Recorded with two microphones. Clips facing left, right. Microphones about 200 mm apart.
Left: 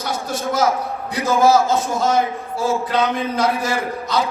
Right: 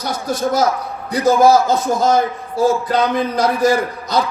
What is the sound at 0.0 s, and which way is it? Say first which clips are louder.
A man's voice: right 4 dB; 40° right (ahead or behind).